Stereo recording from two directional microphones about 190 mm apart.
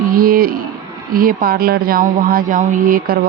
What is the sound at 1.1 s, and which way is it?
Speech, 50° right (ahead or behind).